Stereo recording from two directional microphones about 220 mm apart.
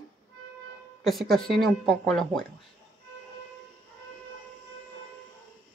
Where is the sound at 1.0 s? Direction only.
Centre (ahead or behind).